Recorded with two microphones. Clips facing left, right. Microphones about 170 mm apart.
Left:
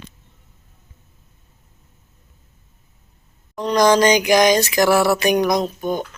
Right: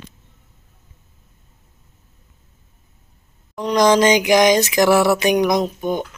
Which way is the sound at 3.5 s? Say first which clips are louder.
Even; 15° right (ahead or behind).